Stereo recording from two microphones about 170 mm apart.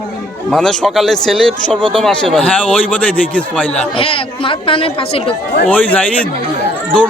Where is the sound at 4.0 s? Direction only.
30° left (ahead or behind).